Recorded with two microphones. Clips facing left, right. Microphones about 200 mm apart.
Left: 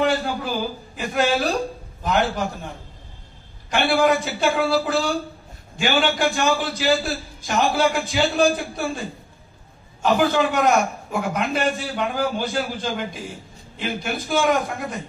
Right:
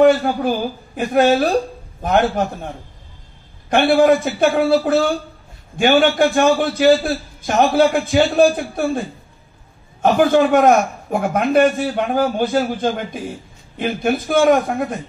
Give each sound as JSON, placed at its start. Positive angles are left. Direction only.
{"t": 0.0, "sound": "a man's voice", "side_deg": -55}
{"t": 3.7, "sound": "a man's voice", "side_deg": -55}
{"t": 10.0, "sound": "a man's voice", "side_deg": -50}